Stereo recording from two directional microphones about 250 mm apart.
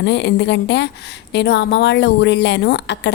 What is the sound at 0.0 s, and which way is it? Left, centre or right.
A woman's voice, left.